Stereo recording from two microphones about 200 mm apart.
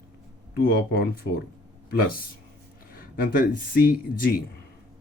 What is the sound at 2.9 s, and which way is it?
Speech, 45° left (ahead or behind).